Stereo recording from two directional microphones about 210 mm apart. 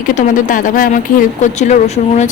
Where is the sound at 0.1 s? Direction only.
40° left (ahead or behind).